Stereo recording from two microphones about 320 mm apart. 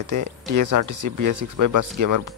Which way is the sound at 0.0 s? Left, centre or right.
Right.